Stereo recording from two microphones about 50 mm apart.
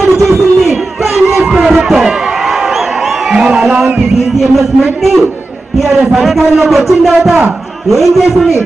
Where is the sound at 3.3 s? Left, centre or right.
Centre.